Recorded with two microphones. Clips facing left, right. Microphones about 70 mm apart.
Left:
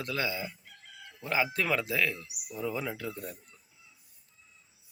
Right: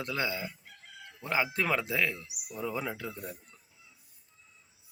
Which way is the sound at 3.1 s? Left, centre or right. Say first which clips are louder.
Left 1 dB; centre.